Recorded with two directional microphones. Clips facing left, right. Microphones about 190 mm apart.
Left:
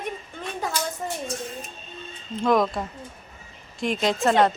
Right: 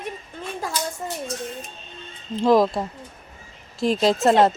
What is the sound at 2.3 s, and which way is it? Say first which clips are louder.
A woman's voice: right 4 dB; 30° right (ahead or behind).